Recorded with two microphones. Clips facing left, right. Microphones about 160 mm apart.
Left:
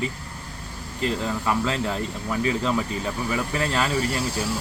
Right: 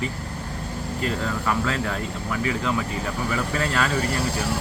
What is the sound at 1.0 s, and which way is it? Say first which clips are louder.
Speech: left 2 dB; 20° left (ahead or behind).